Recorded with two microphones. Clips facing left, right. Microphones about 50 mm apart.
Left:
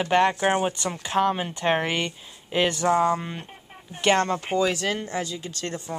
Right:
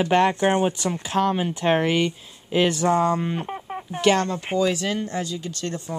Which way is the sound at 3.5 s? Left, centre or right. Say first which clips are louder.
Right 13 dB; right.